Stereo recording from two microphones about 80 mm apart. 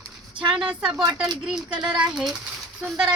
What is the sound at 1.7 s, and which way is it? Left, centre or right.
Speech, right.